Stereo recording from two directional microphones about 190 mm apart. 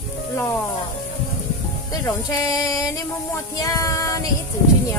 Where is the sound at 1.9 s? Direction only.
20° left (ahead or behind).